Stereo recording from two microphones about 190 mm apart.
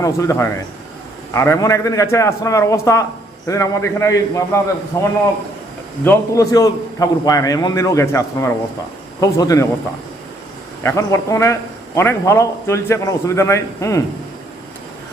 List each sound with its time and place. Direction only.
0.0 s a man's voice: 15° left (ahead or behind)
10.8 s a man's voice: 15° left (ahead or behind)